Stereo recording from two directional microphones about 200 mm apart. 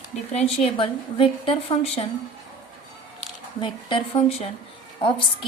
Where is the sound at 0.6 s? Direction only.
25° left (ahead or behind).